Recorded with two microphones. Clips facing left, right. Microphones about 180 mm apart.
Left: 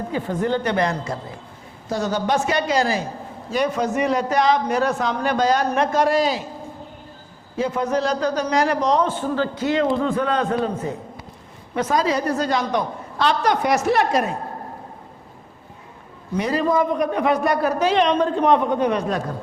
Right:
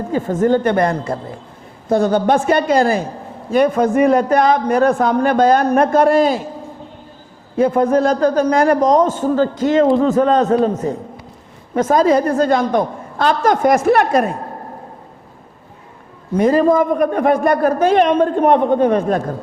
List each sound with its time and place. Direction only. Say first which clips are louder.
0.1 s a man's voice: right 8 dB; 45° right (ahead or behind)
7.5 s a man's voice: right 8 dB; 55° right (ahead or behind)
16.3 s a man's voice: right 7 dB; 45° right (ahead or behind)